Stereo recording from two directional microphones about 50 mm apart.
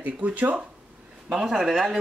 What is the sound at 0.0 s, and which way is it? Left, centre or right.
Speech, right.